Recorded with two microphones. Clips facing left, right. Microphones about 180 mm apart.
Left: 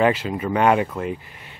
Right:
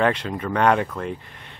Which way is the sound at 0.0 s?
5° left (ahead or behind).